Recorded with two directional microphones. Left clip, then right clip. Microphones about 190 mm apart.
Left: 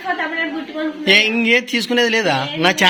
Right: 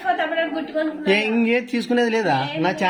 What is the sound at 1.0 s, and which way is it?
Speech, 10° right (ahead or behind).